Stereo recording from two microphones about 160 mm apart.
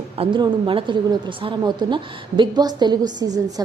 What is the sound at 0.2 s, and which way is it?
A woman's voice, 30° right (ahead or behind).